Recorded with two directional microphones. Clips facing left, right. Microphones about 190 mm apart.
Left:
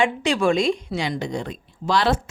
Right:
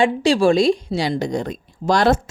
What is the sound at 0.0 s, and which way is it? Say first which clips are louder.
A woman's voice: right 5 dB; 35° right (ahead or behind).